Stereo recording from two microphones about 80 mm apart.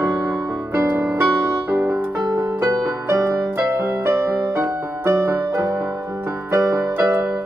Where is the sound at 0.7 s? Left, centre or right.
Right.